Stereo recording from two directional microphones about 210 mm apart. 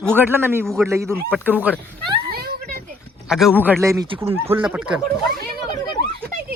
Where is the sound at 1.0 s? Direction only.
Centre (ahead or behind).